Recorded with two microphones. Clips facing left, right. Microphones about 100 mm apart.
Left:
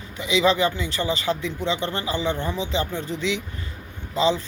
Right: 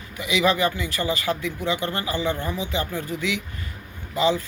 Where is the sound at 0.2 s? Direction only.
20° left (ahead or behind).